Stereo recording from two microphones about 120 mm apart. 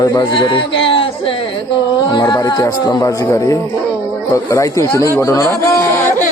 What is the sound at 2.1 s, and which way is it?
Speech, 40° left (ahead or behind).